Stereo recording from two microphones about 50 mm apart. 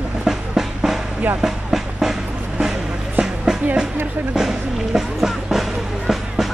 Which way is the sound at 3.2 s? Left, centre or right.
Centre.